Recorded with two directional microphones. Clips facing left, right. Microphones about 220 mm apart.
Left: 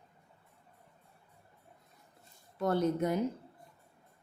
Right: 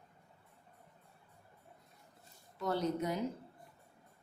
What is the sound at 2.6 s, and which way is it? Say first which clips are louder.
Speech: left 5 dB; 50° left (ahead or behind).